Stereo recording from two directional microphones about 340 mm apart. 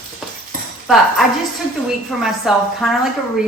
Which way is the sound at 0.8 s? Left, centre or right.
Centre.